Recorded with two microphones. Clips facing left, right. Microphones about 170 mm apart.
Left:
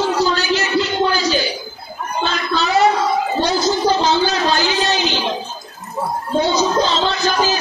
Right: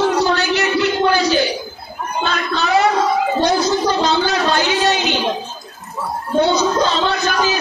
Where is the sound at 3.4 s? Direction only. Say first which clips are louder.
Left 2 dB; 60° right (ahead or behind).